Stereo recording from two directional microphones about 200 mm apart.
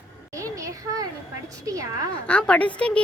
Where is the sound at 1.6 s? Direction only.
15° right (ahead or behind).